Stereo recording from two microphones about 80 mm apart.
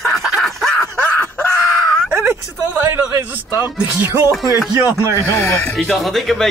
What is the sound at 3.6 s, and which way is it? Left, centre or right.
Speech, right.